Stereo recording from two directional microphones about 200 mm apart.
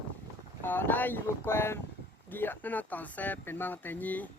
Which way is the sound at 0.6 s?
10° left (ahead or behind).